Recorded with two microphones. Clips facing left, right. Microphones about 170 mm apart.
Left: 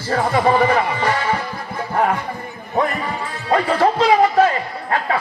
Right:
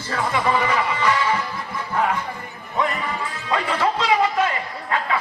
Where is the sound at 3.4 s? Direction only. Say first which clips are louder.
Left 6 dB; 40° left (ahead or behind).